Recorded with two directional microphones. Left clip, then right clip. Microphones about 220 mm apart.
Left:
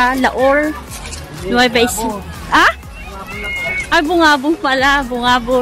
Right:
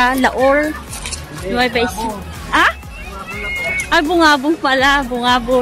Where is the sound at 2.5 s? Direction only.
15° left (ahead or behind).